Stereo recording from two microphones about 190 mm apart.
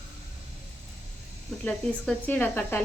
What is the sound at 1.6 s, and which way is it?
Speech, 5° left (ahead or behind).